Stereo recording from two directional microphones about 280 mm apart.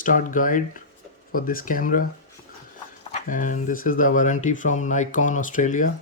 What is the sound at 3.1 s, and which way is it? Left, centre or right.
Speech, left.